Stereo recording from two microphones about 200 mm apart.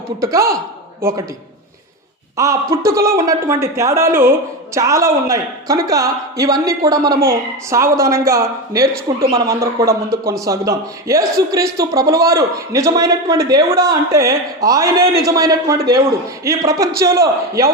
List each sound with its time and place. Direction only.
0.2 s a man's voice: 15° right (ahead or behind)
2.3 s a man's voice: 15° right (ahead or behind)